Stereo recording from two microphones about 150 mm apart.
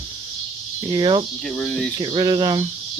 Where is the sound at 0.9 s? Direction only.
35° right (ahead or behind).